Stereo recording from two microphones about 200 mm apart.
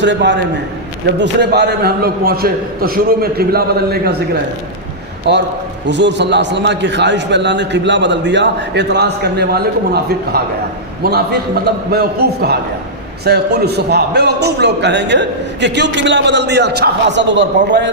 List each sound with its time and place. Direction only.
0.0 s a man's voice: 60° right (ahead or behind)
5.3 s a man's voice: 60° right (ahead or behind)